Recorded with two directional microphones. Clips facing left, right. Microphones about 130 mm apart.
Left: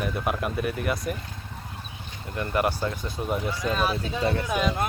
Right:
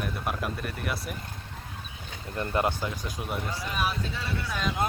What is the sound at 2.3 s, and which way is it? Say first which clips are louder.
Speech: left 2 dB; 30° right (ahead or behind).